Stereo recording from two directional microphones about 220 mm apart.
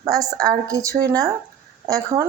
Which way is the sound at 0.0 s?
15° right (ahead or behind).